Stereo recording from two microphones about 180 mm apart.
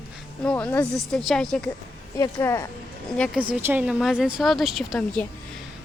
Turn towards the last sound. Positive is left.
turn(degrees=0)  # may be behind; listen again after turning